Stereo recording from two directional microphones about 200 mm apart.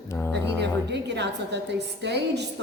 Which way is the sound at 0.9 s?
60° right (ahead or behind).